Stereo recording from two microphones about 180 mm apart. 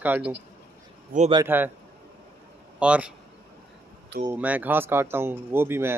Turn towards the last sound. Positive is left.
turn(degrees=-15)  # may be behind; listen again after turning